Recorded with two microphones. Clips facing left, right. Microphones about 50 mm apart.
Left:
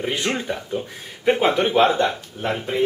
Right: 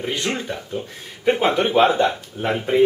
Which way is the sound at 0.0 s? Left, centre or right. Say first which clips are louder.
Left 1 dB; centre.